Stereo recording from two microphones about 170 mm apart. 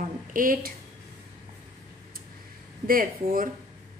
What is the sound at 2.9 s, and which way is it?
Speech, 55° right (ahead or behind).